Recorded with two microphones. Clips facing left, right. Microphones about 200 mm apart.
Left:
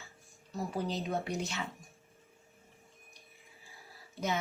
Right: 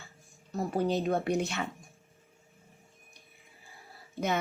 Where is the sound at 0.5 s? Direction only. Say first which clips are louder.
Right 6 dB; 55° right (ahead or behind).